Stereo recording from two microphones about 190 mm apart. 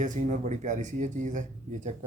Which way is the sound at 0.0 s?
40° right (ahead or behind).